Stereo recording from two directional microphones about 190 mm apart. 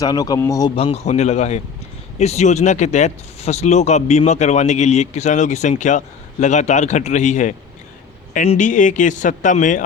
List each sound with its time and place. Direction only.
0.0 s speech: 20° left (ahead or behind)
0.8 s speech: 35° left (ahead or behind)